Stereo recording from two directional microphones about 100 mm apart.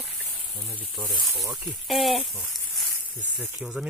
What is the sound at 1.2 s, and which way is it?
Speech, centre (ahead or behind).